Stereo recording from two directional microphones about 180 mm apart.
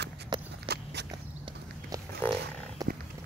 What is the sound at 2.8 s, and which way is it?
Wild animals, 20° right (ahead or behind).